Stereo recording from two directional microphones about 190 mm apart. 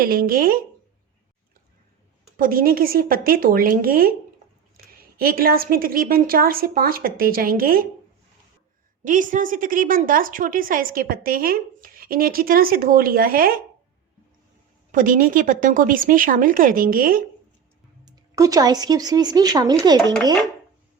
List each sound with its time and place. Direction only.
0.0 s a woman's voice: 50° right (ahead or behind)
2.4 s a woman's voice: 50° right (ahead or behind)
5.1 s a woman's voice: 50° right (ahead or behind)
9.0 s a woman's voice: 45° right (ahead or behind)
14.9 s a woman's voice: 45° right (ahead or behind)
18.0 s speech: 20° right (ahead or behind)